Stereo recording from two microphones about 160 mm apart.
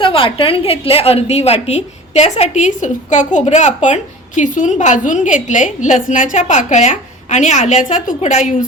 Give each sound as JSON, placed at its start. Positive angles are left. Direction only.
{"t": 0.0, "sound": "a woman's voice", "side_deg": 35}